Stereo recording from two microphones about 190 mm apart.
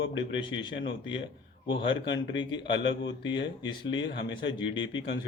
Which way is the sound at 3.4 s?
25° left (ahead or behind).